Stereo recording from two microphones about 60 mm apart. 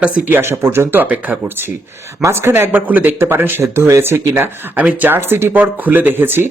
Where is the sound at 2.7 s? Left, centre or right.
Right.